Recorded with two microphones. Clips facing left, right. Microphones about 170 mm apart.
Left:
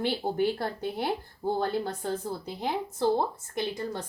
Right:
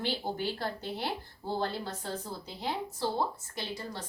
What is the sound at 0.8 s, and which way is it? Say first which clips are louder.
Speech: left 5 dB; 50° left (ahead or behind).